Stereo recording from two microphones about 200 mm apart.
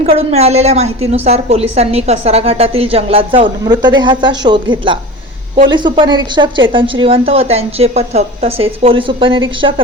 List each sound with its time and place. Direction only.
0.0 s a woman's voice: 30° right (ahead or behind)